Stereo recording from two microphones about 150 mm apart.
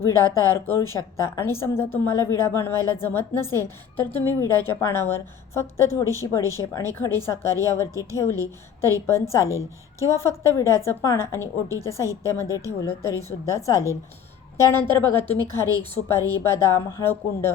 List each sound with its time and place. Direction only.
0.0 s a woman's voice: 15° left (ahead or behind)